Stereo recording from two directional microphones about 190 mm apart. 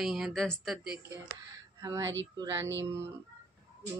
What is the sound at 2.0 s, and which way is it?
Speech, 80° right.